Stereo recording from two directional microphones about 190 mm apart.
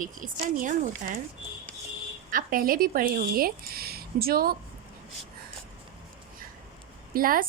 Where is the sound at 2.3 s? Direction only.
45° right (ahead or behind).